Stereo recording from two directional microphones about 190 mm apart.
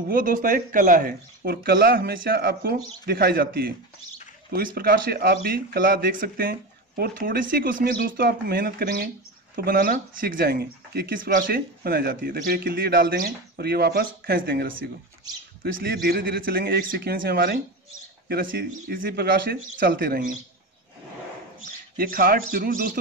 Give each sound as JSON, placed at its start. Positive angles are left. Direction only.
{"t": 0.1, "sound": "a man's voice", "side_deg": -45}
{"t": 21.9, "sound": "speech", "side_deg": -50}